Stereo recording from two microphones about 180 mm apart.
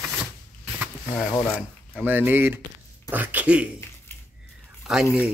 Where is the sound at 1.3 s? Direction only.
15° left (ahead or behind).